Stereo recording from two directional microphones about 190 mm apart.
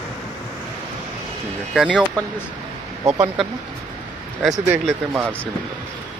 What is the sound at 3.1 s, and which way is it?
Speech, 10° right (ahead or behind).